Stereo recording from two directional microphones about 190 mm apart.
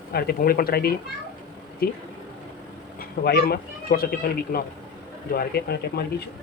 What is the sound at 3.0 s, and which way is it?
Speech, 55° left (ahead or behind).